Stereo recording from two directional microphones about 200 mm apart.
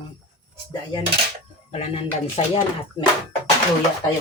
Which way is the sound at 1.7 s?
30° left (ahead or behind).